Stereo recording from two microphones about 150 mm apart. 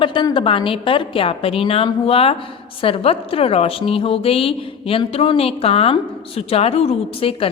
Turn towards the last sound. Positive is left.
turn(degrees=40)  # may be behind; listen again after turning